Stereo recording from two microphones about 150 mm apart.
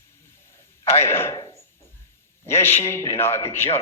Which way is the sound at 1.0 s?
15° left (ahead or behind).